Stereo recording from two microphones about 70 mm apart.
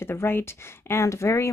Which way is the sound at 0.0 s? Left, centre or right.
Left.